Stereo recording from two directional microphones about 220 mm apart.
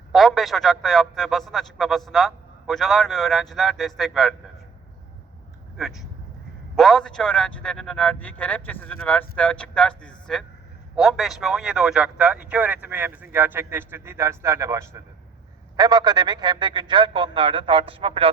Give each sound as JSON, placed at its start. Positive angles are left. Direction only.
{"t": 0.1, "sound": "a man's voice", "side_deg": 0}
{"t": 5.7, "sound": "a man's voice", "side_deg": 0}